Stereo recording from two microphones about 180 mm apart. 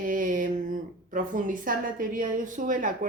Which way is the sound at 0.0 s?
50° right (ahead or behind).